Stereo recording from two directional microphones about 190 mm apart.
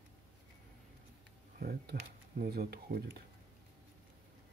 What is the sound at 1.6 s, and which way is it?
Speech, 55° right (ahead or behind).